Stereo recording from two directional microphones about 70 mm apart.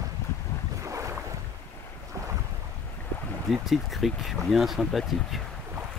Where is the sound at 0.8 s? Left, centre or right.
Right.